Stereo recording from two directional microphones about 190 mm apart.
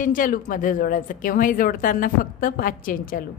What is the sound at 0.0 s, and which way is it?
A woman's voice, 45° left (ahead or behind).